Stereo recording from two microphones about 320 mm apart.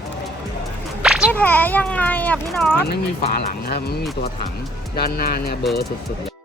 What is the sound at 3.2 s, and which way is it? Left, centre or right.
Speech, left.